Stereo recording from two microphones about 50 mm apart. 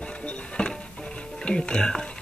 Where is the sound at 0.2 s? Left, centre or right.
Left.